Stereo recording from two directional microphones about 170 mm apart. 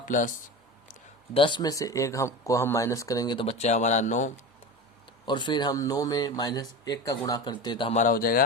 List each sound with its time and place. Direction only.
0.0 s speech: 50° left (ahead or behind)
1.3 s speech: 30° left (ahead or behind); by 4.3 s 45° left (ahead or behind)
5.2 s speech: 25° left (ahead or behind)
7.9 s speech: 55° left (ahead or behind)